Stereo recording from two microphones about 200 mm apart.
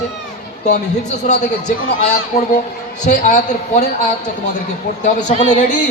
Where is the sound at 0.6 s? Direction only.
35° left (ahead or behind).